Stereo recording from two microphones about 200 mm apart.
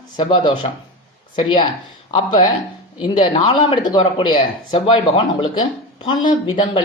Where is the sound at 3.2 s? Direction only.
25° left (ahead or behind).